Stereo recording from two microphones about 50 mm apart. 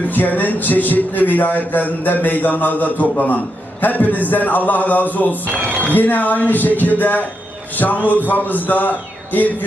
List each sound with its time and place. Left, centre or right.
0.1 s a man's voice: left
5.5 s speech: right
5.9 s a man's voice: left